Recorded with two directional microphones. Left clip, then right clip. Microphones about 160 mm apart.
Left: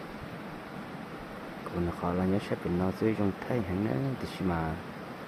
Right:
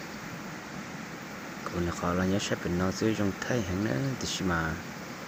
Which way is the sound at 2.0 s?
Centre (ahead or behind).